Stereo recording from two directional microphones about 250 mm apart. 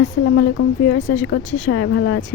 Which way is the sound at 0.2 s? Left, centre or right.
Left.